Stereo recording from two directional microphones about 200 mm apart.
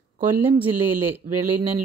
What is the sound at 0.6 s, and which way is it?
Speech, 10° right (ahead or behind).